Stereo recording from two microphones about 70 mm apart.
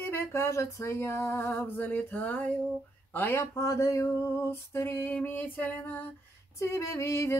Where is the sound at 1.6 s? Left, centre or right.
Left.